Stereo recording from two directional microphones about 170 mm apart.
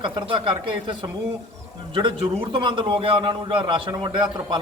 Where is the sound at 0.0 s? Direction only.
30° right (ahead or behind).